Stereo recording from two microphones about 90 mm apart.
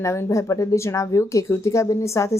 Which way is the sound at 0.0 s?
30° left (ahead or behind).